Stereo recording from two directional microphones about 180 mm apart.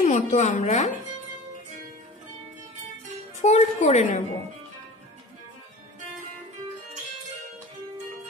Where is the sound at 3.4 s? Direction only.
40° left (ahead or behind).